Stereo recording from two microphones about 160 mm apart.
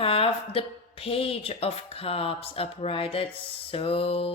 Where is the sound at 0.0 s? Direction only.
35° left (ahead or behind).